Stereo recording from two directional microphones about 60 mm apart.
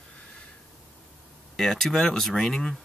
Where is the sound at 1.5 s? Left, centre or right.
Centre.